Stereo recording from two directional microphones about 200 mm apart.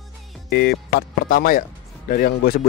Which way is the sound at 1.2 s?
45° left (ahead or behind).